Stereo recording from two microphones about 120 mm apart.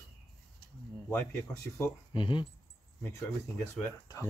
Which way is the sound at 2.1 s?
40° left (ahead or behind).